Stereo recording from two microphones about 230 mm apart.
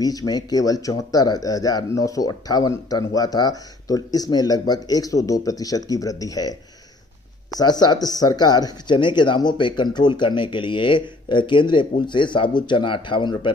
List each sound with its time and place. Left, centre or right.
0.0 s speech: centre
7.5 s speech: centre